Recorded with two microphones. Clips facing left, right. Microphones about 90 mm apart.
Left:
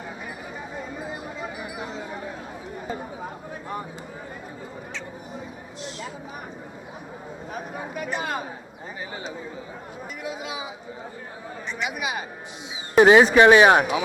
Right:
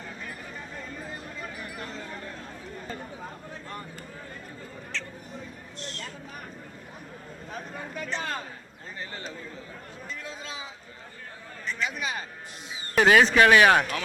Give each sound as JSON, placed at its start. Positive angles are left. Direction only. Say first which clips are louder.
{"t": 0.8, "sound": "chatter", "louder": "left 6 dB", "side_deg": 10}
{"t": 5.8, "sound": "a sound", "louder": "left 4 dB", "side_deg": 5}
{"t": 7.5, "sound": "speech", "louder": "left 4 dB", "side_deg": 15}
{"t": 10.2, "sound": "speech", "louder": "left 11 dB", "side_deg": 15}
{"t": 11.7, "sound": "speech", "louder": "left 2 dB", "side_deg": 10}
{"t": 13.0, "sound": "speech", "louder": "left 5 dB", "side_deg": 20}